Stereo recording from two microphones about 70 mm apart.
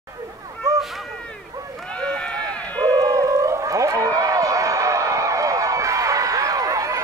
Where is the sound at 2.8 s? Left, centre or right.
Right.